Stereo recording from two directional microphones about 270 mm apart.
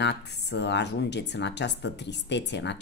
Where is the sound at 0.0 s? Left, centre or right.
Left.